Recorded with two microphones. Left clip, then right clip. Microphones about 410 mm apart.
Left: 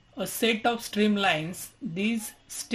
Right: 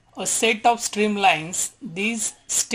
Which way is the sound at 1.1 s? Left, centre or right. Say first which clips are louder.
Right 8 dB; centre.